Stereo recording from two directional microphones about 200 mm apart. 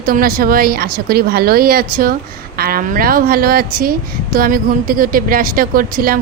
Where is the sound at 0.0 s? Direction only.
45° right (ahead or behind).